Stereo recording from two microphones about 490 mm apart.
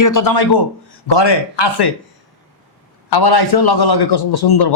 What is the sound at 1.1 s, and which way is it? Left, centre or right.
Speech, left.